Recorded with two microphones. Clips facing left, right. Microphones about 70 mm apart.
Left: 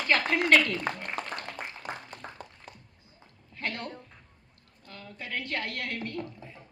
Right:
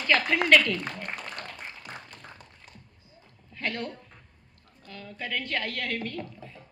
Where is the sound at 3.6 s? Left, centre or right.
Left.